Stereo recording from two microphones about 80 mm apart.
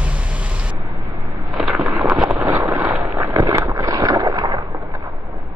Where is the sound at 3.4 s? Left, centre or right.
Right.